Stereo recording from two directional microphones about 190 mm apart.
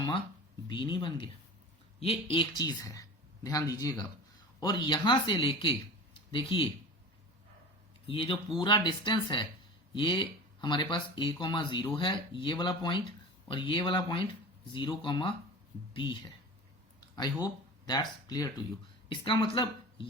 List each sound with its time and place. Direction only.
0.7 s speech: 25° left (ahead or behind)
8.0 s speech: 30° left (ahead or behind)
17.2 s speech: 20° left (ahead or behind)